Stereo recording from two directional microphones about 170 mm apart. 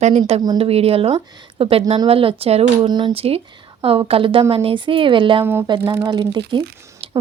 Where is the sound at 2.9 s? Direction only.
25° right (ahead or behind).